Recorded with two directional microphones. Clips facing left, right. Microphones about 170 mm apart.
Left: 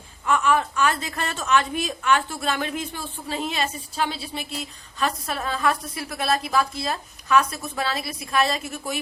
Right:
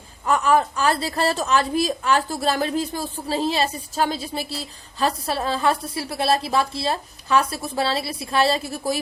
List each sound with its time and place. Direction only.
0.3 s a woman's voice: 35° right (ahead or behind)